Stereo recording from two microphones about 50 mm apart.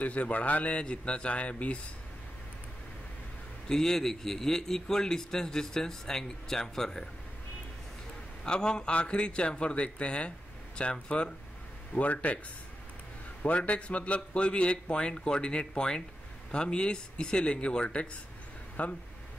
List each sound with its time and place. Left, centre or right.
0.0 s a man's voice: left
3.6 s a man's voice: centre
8.5 s a man's voice: centre
13.4 s a man's voice: left